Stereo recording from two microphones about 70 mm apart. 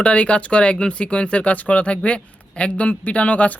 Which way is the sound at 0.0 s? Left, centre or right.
Centre.